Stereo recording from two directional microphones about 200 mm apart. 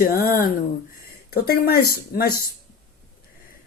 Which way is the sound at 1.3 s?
50° left (ahead or behind).